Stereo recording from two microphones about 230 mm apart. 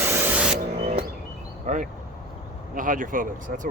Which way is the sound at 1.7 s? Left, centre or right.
Right.